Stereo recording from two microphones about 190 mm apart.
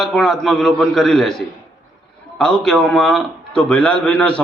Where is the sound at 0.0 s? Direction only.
Centre (ahead or behind).